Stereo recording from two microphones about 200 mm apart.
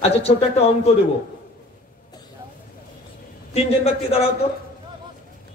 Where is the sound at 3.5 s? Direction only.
30° left (ahead or behind).